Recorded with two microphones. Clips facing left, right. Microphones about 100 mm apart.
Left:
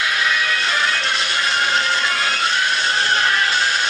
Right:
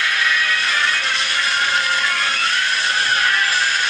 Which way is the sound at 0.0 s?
10° left (ahead or behind).